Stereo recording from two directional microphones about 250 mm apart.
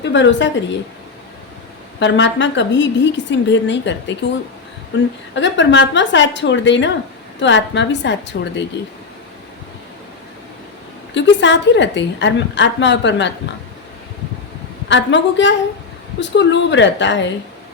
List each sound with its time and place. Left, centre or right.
0.0 s a woman's voice: left
2.0 s a woman's voice: left
5.3 s a woman's voice: left
11.1 s a woman's voice: left
14.8 s a woman's voice: left